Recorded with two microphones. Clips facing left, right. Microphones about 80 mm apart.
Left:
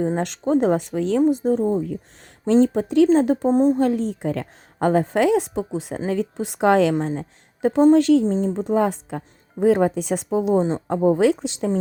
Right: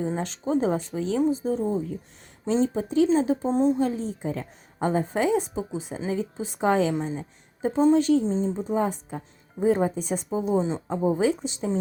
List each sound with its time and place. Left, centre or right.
0.4 s a woman's voice: left
2.5 s a woman's voice: left
7.9 s speech: left
10.2 s a woman's voice: left